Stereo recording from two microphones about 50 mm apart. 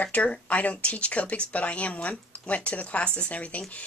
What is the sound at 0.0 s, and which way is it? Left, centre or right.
A woman's voice, left.